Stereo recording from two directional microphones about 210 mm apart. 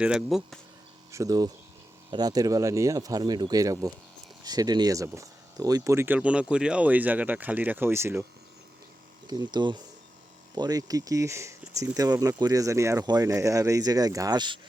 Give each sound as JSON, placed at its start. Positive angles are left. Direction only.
{"t": 0.0, "sound": "speech", "side_deg": -5}
{"t": 1.1, "sound": "speech", "side_deg": -15}
{"t": 9.2, "sound": "speech", "side_deg": -20}